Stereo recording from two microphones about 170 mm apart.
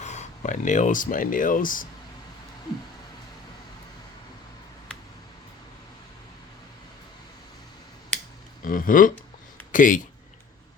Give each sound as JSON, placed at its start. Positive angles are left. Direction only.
{"t": 0.0, "sound": "speech", "side_deg": 45}
{"t": 8.6, "sound": "speech", "side_deg": 55}